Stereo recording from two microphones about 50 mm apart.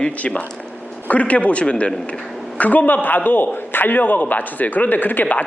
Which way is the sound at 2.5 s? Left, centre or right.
Left.